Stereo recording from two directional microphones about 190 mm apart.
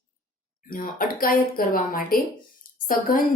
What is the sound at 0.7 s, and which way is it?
Speech, 45° left (ahead or behind).